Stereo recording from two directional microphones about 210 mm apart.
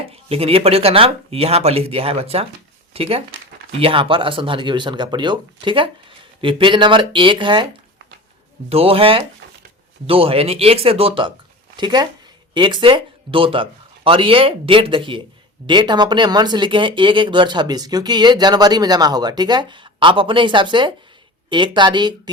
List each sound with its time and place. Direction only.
0.1 s speech: 25° right (ahead or behind)
8.7 s speech: 25° right (ahead or behind)